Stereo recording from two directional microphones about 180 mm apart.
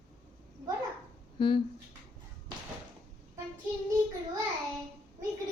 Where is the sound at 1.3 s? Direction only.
25° left (ahead or behind).